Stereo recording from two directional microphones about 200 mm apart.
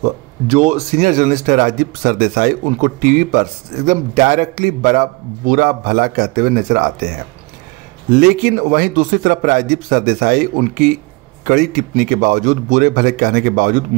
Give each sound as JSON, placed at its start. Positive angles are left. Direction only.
{"t": 0.0, "sound": "speech", "side_deg": -35}
{"t": 8.1, "sound": "a man's voice", "side_deg": -40}